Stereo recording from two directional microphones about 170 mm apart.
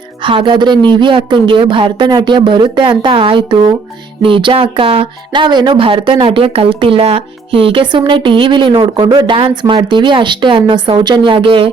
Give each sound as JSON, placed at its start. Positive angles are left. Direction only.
{"t": 0.2, "sound": "speech", "side_deg": -30}